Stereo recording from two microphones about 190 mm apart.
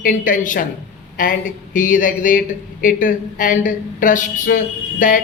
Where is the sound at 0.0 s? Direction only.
45° left (ahead or behind).